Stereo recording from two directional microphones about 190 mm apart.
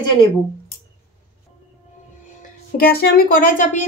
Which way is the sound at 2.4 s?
50° left (ahead or behind).